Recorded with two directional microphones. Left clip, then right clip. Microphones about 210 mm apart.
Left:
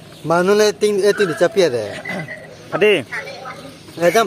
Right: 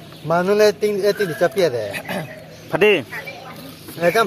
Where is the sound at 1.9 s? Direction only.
50° right (ahead or behind).